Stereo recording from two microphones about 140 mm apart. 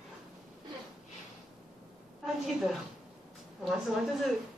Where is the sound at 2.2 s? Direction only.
Centre (ahead or behind).